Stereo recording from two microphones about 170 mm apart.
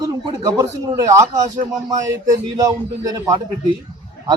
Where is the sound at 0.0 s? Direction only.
20° right (ahead or behind).